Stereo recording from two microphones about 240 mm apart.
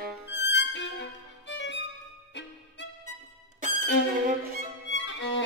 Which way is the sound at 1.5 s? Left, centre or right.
Left.